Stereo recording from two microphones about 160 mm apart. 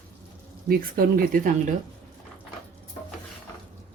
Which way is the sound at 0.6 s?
70° right (ahead or behind).